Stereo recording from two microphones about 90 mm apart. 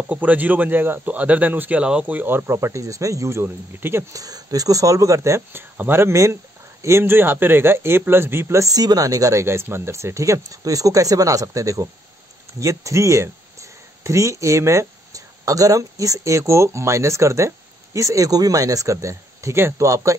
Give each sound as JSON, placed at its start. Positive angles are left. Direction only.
{"t": 0.1, "sound": "a man's voice", "side_deg": -20}
{"t": 4.1, "sound": "a man's voice", "side_deg": -45}